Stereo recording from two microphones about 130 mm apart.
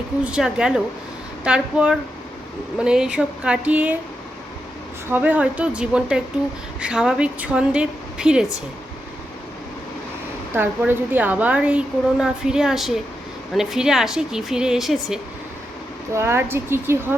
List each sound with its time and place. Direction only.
0.3 s a woman's voice: 5° right (ahead or behind)
5.0 s a woman's voice: 15° right (ahead or behind)
10.5 s a woman's voice: 15° right (ahead or behind)
16.1 s a woman's voice: 20° right (ahead or behind)